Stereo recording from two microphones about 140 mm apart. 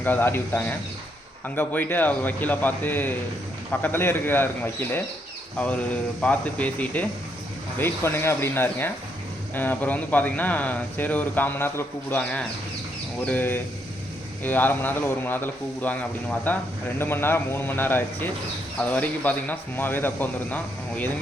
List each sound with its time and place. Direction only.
0.0 s speech: 15° left (ahead or behind)